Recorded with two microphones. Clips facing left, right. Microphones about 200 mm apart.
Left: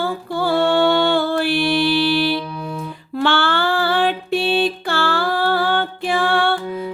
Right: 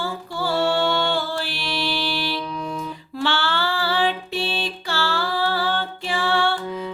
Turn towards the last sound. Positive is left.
turn(degrees=55)  # may be behind; listen again after turning